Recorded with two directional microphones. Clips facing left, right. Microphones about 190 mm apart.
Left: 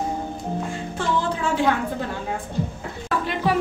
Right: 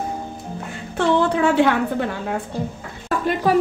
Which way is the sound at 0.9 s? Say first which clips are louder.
Right 8 dB; 65° right (ahead or behind).